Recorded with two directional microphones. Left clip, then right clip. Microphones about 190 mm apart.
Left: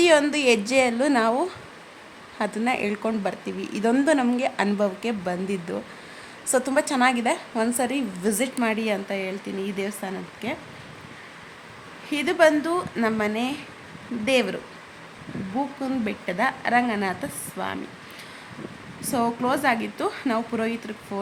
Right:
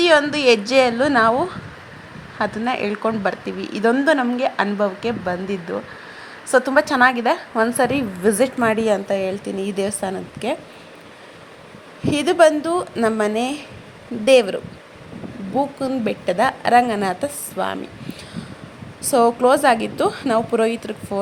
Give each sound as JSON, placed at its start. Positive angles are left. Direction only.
{"t": 0.0, "sound": "a woman's voice", "side_deg": 5}
{"t": 12.1, "sound": "a woman's voice", "side_deg": -20}
{"t": 19.1, "sound": "a woman's voice", "side_deg": -20}